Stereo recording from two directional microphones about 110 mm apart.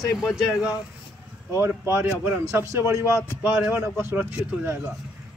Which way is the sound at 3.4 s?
10° right (ahead or behind).